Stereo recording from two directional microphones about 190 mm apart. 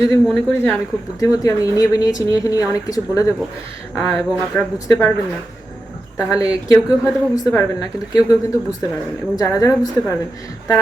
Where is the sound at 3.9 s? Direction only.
Centre (ahead or behind).